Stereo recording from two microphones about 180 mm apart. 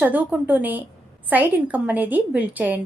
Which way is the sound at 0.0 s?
10° right (ahead or behind).